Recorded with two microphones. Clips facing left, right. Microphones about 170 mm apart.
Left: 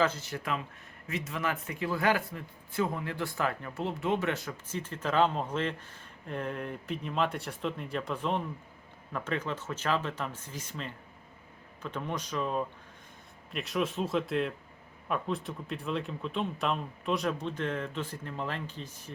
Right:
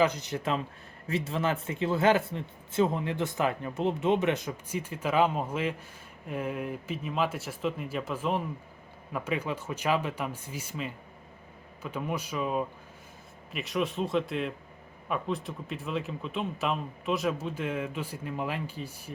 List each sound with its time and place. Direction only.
0.0 s speech: 15° right (ahead or behind)